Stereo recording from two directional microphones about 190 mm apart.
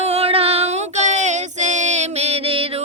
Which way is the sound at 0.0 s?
35° right (ahead or behind).